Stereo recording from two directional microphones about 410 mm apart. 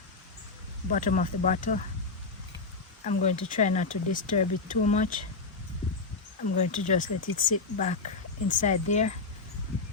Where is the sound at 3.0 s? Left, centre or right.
Centre.